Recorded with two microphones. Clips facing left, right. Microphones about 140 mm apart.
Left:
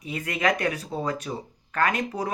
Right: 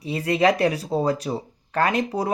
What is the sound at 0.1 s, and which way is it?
Speech, 30° right (ahead or behind).